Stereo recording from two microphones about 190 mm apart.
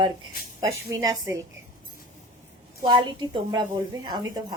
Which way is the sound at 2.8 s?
25° right (ahead or behind).